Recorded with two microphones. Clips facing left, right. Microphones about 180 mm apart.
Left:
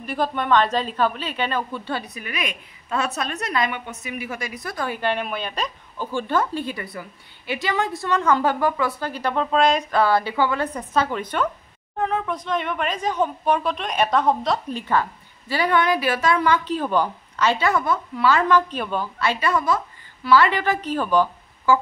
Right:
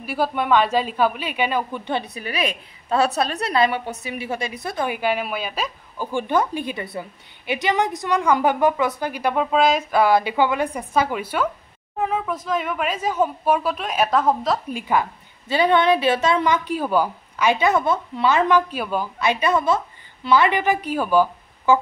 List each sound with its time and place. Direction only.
0.0 s a woman's voice: 5° right (ahead or behind)
18.7 s a woman's voice: 10° right (ahead or behind)
19.1 s a woman's voice: 20° right (ahead or behind)